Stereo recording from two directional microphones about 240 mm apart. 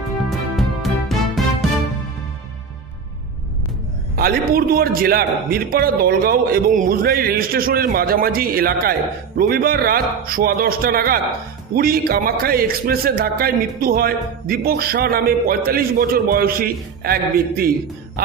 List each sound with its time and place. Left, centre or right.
0.6 s music: centre
4.2 s a man's voice: right